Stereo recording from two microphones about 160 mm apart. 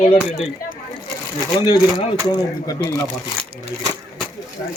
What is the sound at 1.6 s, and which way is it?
Speech, 25° left (ahead or behind).